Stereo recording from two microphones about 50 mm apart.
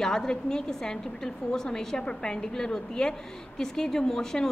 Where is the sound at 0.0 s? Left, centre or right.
Centre.